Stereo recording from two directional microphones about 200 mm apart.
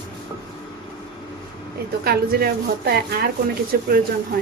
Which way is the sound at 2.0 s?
50° right (ahead or behind).